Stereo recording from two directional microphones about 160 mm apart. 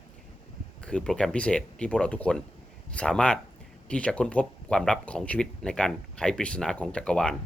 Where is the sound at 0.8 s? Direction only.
5° left (ahead or behind).